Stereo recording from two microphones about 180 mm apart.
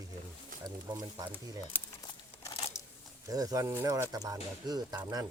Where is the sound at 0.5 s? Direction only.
50° right (ahead or behind).